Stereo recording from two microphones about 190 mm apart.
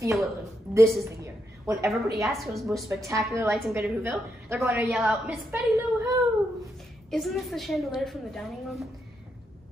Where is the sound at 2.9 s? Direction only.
15° right (ahead or behind).